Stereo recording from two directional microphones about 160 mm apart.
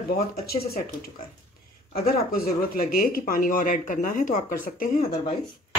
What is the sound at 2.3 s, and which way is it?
Speech, 65° left (ahead or behind).